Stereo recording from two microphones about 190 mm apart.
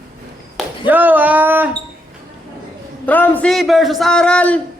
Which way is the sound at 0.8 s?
10° right (ahead or behind).